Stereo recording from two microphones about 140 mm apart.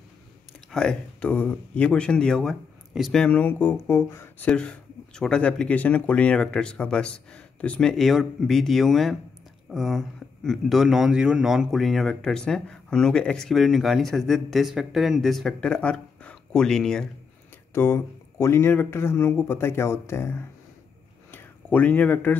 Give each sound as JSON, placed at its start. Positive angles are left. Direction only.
{"t": 0.7, "sound": "speech", "side_deg": 5}
{"t": 4.5, "sound": "speech", "side_deg": 5}
{"t": 17.7, "sound": "speech", "side_deg": 20}